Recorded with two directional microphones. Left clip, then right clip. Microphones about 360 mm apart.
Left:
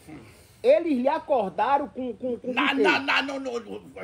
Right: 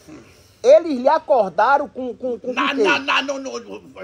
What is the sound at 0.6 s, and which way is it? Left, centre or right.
Speech, centre.